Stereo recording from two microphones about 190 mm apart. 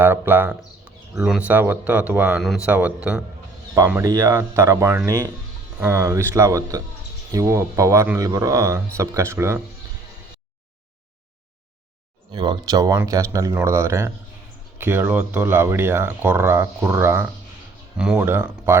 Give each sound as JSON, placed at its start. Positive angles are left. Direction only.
{"t": 0.0, "sound": "speech", "side_deg": -10}
{"t": 12.3, "sound": "speech", "side_deg": -25}